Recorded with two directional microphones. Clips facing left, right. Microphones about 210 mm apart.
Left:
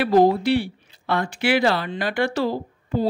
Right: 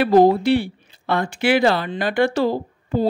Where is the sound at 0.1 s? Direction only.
55° right (ahead or behind).